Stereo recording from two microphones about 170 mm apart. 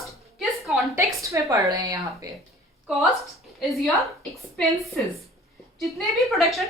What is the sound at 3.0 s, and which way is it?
A woman's voice, centre (ahead or behind).